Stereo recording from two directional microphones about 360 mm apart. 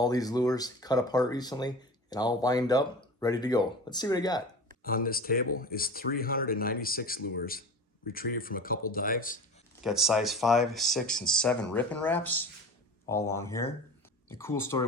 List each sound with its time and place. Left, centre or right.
0.0 s speech: centre
4.8 s speech: left
9.8 s speech: centre